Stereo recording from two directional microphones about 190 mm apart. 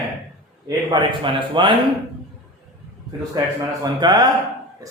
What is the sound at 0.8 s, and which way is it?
Speech, 25° right (ahead or behind).